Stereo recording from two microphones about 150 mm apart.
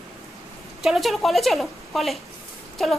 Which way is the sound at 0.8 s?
Centre (ahead or behind).